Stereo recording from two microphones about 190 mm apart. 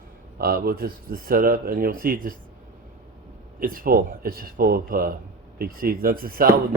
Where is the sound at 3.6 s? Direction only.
50° right (ahead or behind).